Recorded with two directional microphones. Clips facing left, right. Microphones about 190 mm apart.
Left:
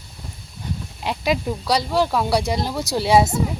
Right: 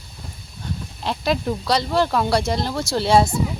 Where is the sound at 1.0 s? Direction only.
10° left (ahead or behind).